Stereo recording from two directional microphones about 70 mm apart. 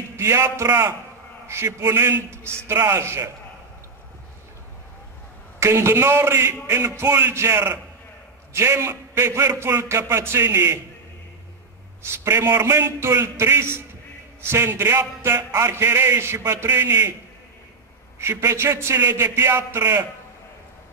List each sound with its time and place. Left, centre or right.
0.1 s speech: right
5.6 s speech: right
12.0 s speech: right
18.2 s speech: right
19.8 s a man's voice: right